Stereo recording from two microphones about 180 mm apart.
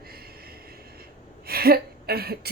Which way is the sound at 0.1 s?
55° right (ahead or behind).